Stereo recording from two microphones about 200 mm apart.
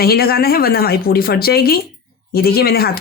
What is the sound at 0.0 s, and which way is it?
Speech, 50° left (ahead or behind).